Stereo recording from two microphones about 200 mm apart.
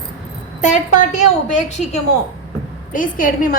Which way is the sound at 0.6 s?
40° left (ahead or behind).